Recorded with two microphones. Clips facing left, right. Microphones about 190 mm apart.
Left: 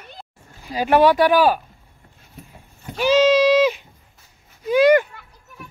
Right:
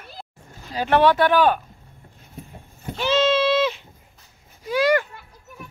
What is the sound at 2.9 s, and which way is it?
Goat, 10° left (ahead or behind).